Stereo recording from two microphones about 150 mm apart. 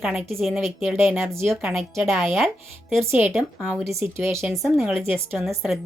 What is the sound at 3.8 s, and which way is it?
Speech, 15° right (ahead or behind).